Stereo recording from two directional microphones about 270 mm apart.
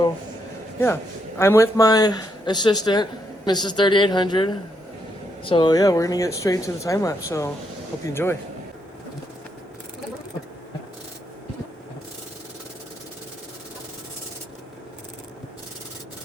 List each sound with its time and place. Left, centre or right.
1.4 s speech: centre